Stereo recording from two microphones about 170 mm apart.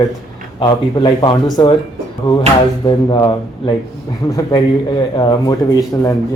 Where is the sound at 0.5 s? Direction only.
25° left (ahead or behind).